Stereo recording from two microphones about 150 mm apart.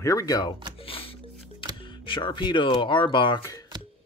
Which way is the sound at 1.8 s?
35° left (ahead or behind).